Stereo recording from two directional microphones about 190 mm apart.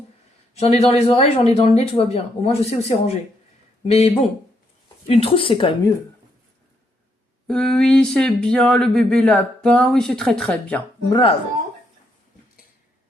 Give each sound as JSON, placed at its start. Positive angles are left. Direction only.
{"t": 0.5, "sound": "speech", "side_deg": 35}
{"t": 7.4, "sound": "a sound", "side_deg": 5}
{"t": 11.1, "sound": "speech", "side_deg": 30}